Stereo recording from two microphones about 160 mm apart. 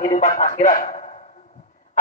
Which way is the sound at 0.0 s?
60° left (ahead or behind).